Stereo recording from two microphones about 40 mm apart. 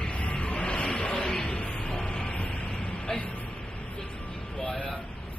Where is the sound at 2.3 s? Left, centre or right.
Left.